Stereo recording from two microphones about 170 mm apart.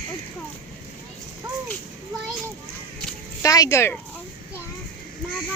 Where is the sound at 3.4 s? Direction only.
20° left (ahead or behind).